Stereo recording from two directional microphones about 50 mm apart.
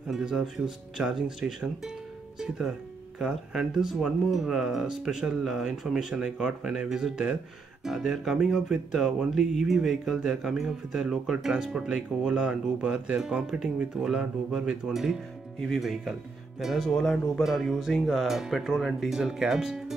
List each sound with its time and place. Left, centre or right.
0.1 s music: centre
2.3 s speech: centre
3.2 s music: centre
15.7 s speech: centre
16.9 s speech: centre
17.4 s music: centre
18.0 s speech: centre